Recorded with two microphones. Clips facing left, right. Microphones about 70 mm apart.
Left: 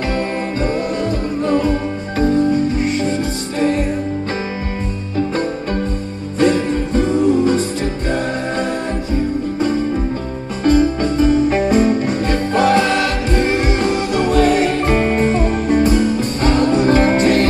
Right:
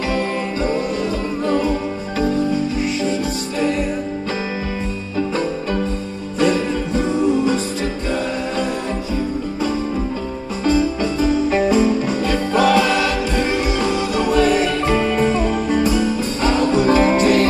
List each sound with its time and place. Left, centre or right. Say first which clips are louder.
1.5 s music: left 2 dB; left
6.4 s music: left 3 dB; left
9.1 s music: left 6 dB; left